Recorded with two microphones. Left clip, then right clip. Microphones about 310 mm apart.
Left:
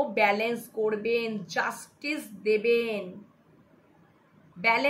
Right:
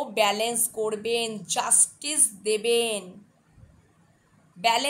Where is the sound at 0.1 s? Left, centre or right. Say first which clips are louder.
Right 1 dB; right.